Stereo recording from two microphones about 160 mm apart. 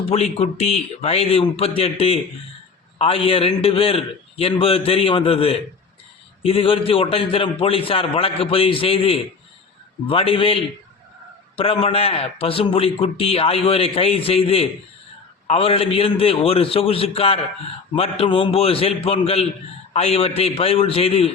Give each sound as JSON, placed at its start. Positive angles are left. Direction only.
{"t": 0.1, "sound": "a man's voice", "side_deg": 45}